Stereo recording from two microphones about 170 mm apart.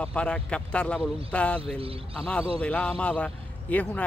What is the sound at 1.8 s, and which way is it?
Speech, 35° right (ahead or behind).